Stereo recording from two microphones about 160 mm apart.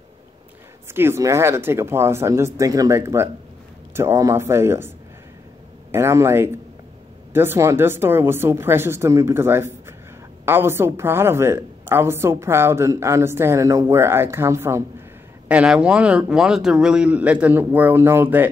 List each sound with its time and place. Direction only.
0.9 s a woman's voice: 15° right (ahead or behind)